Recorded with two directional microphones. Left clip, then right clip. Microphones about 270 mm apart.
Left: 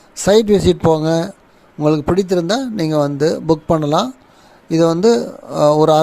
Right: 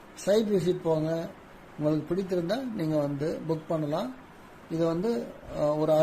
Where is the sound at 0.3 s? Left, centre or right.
Left.